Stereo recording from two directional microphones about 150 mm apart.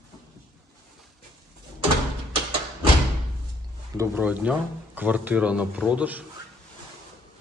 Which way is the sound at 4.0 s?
10° right (ahead or behind).